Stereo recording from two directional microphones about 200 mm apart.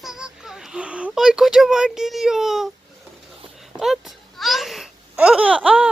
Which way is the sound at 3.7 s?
Centre (ahead or behind).